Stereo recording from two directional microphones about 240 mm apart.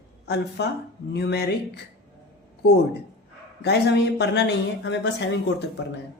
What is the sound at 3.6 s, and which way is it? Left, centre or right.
Speech, left.